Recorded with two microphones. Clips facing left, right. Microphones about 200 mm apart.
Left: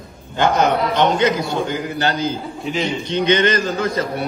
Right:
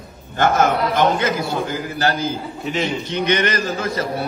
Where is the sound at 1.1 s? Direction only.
20° left (ahead or behind).